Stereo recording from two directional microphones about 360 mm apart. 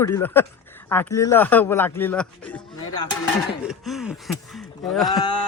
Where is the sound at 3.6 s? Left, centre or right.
Centre.